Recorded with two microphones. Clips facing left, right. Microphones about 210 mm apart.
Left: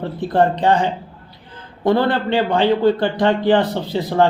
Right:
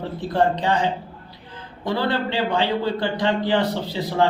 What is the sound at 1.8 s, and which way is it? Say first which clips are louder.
Speech: left 6 dB; 55° left (ahead or behind).